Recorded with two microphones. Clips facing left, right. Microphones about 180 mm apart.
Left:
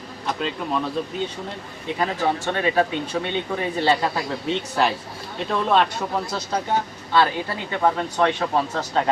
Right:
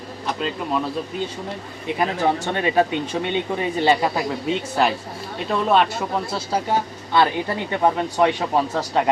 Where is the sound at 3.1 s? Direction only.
25° right (ahead or behind).